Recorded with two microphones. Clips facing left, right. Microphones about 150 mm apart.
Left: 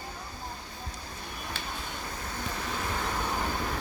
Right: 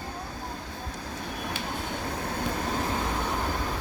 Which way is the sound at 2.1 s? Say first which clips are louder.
Right 6 dB; 60° right (ahead or behind).